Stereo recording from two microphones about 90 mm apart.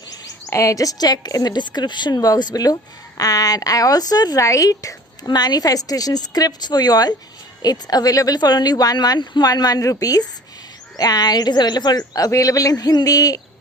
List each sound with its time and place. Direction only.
0.1 s speech: 35° left (ahead or behind)